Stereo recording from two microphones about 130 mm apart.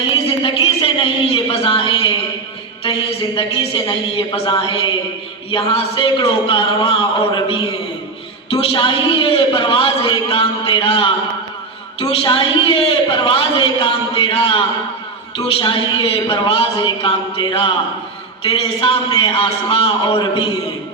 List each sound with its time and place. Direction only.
0.0 s a woman's voice: 40° left (ahead or behind)
12.2 s a man's voice: 40° left (ahead or behind)